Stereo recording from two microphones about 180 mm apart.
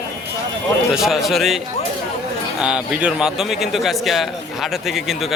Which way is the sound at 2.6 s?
5° right (ahead or behind).